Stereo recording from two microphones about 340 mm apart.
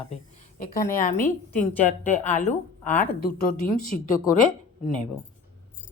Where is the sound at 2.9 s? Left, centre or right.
Centre.